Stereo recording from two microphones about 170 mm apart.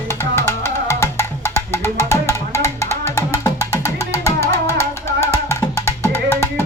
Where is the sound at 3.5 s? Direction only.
15° right (ahead or behind).